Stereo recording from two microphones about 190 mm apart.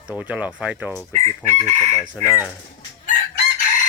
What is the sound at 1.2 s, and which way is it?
Chicken, 40° right (ahead or behind).